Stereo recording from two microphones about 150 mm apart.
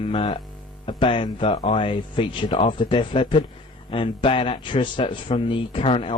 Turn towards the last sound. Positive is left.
turn(degrees=40)  # may be behind; listen again after turning